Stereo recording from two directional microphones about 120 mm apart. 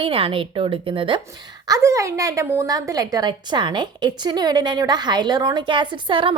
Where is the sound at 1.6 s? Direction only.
30° right (ahead or behind); by 6.3 s 45° right (ahead or behind).